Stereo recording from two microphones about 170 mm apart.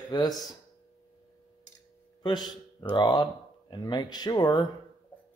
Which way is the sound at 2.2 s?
25° left (ahead or behind).